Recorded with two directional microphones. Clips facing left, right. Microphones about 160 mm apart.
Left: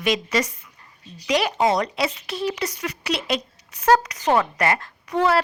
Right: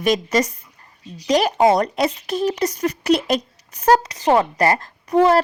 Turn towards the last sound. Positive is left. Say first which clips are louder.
# right 5 dB
turn(degrees=-40)  # may be behind; listen again after turning